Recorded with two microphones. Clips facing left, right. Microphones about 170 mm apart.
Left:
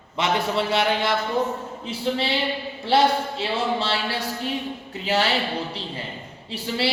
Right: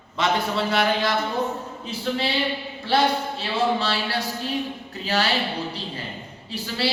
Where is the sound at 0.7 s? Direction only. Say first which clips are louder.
Right 1 dB; 25° left (ahead or behind).